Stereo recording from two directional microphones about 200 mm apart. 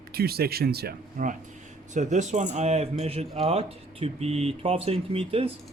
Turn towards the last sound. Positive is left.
turn(degrees=-30)  # may be behind; listen again after turning